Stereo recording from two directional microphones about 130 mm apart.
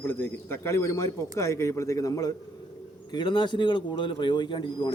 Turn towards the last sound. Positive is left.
turn(degrees=35)  # may be behind; listen again after turning